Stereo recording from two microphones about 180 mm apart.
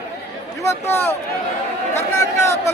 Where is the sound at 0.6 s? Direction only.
15° left (ahead or behind).